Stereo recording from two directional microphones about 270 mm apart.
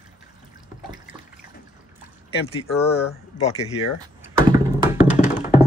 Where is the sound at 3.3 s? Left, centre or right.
Left.